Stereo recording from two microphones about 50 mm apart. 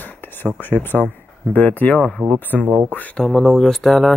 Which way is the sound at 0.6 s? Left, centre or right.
Left.